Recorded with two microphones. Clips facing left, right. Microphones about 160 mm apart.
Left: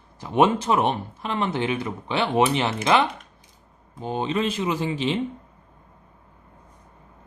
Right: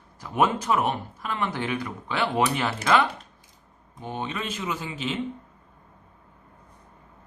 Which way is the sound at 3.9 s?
30° left (ahead or behind).